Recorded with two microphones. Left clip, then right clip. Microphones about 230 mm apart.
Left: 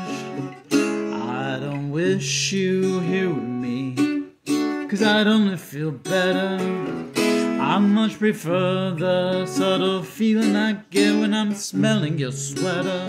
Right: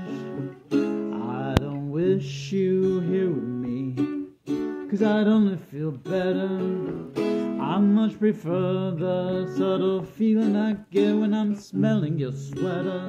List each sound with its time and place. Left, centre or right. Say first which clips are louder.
0.7 s music: left 4 dB; centre
1.1 s music: left 2 dB; left
7.5 s music: left 4 dB; left